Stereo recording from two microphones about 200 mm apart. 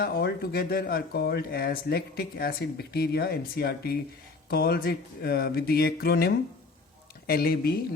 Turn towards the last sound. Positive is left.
turn(degrees=50)  # may be behind; listen again after turning